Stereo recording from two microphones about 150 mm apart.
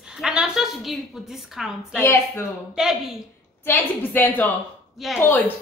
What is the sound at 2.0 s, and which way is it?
Speech, 15° left (ahead or behind).